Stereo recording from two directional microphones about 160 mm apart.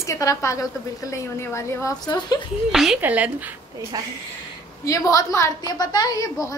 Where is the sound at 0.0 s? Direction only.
20° left (ahead or behind).